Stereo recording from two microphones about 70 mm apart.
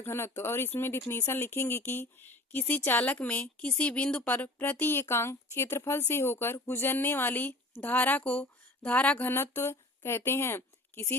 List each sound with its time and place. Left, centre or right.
0.0 s speech: left; by 4.3 s centre
4.3 s speech: left
9.3 s a woman's voice: left